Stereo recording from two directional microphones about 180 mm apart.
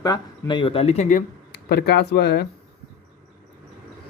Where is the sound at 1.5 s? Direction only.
60° left (ahead or behind).